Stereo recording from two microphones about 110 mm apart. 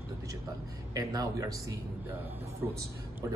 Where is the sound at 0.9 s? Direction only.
35° right (ahead or behind).